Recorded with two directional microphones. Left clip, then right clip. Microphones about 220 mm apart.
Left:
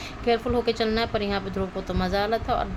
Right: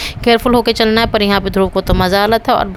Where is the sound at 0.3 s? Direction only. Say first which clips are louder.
Right 12 dB; 50° right (ahead or behind).